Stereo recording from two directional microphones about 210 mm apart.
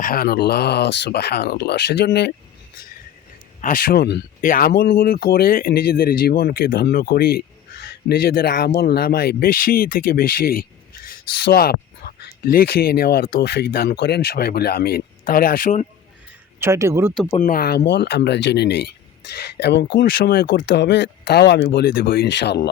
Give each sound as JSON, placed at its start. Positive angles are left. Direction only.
{"t": 0.0, "sound": "speech", "side_deg": 45}
{"t": 3.6, "sound": "speech", "side_deg": 40}
{"t": 16.6, "sound": "speech", "side_deg": -10}
{"t": 17.4, "sound": "speech", "side_deg": 45}